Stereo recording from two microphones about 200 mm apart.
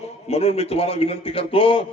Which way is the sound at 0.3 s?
30° left (ahead or behind).